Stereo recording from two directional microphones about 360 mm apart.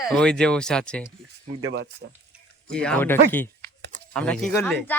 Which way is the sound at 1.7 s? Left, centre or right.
Right.